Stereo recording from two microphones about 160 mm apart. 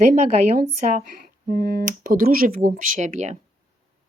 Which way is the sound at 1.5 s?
60° right (ahead or behind).